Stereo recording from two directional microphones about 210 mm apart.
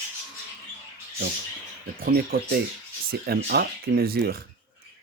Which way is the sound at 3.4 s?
50° right (ahead or behind).